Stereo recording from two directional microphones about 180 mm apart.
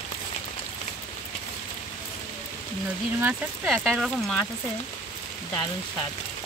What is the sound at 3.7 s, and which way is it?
Speech, centre (ahead or behind).